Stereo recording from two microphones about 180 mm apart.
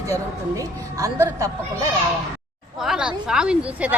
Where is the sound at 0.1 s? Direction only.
20° right (ahead or behind).